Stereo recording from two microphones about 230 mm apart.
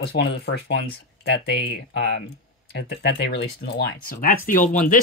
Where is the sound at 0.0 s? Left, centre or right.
Left.